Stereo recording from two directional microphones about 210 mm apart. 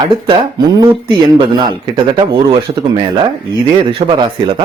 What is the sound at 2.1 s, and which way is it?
Speech, 25° right (ahead or behind).